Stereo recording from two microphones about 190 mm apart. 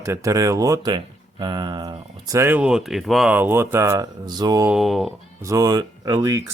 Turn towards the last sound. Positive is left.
turn(degrees=-15)  # may be behind; listen again after turning